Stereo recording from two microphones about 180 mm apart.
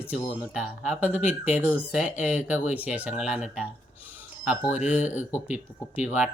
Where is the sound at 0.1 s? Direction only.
5° right (ahead or behind).